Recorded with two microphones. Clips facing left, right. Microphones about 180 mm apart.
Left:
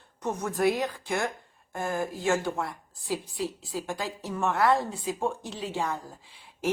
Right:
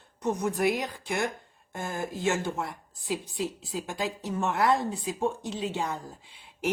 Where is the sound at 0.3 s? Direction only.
15° right (ahead or behind).